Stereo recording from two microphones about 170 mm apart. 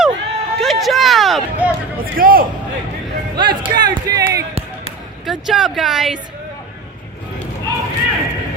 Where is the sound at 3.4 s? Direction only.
25° right (ahead or behind).